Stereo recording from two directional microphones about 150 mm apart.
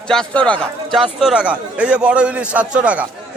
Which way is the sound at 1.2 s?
5° right (ahead or behind).